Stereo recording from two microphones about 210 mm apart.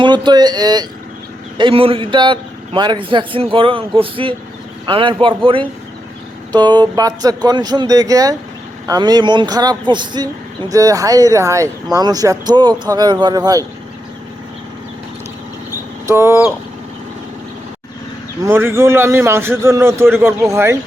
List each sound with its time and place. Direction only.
0.0 s a man's voice: 20° right (ahead or behind)
16.0 s speech: 10° right (ahead or behind)
18.4 s speech: 10° right (ahead or behind)